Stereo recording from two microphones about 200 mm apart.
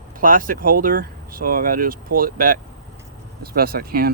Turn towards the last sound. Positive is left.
turn(degrees=-50)  # may be behind; listen again after turning